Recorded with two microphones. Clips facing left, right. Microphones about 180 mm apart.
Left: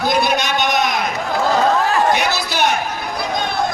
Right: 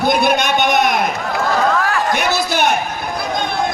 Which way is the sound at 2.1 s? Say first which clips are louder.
Right 2 dB; 50° right (ahead or behind).